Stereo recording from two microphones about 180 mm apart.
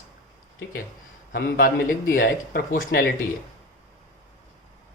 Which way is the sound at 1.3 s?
50° left (ahead or behind).